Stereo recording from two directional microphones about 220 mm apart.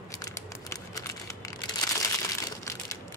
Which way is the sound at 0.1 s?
15° left (ahead or behind).